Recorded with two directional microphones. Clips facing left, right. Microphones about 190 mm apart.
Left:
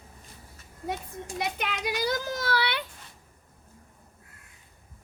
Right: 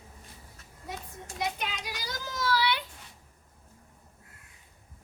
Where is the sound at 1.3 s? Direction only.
60° left (ahead or behind).